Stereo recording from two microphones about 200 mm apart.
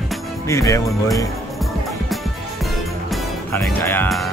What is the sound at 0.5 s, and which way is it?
Speech, 15° left (ahead or behind).